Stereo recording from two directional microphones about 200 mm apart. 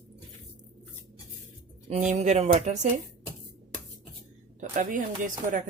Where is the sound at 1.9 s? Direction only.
35° right (ahead or behind).